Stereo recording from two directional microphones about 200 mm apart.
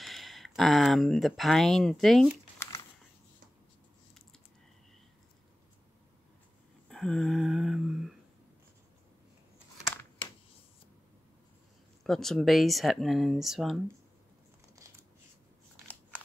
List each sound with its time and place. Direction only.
0.0 s speech: centre (ahead or behind)
2.6 s typing: 15° left (ahead or behind)
6.9 s a sound: centre (ahead or behind)
12.0 s speech: centre (ahead or behind)